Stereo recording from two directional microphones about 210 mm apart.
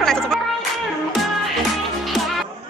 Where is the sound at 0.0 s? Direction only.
Centre (ahead or behind).